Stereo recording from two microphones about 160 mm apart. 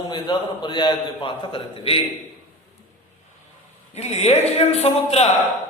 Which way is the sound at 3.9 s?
40° left (ahead or behind).